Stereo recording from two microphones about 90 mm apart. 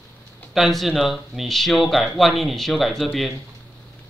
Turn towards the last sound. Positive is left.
turn(degrees=0)  # may be behind; listen again after turning